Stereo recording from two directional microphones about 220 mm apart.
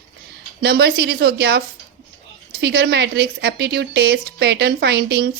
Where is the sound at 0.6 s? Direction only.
45° right (ahead or behind).